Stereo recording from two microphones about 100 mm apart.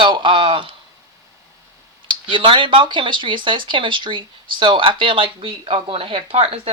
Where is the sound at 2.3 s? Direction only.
60° right (ahead or behind).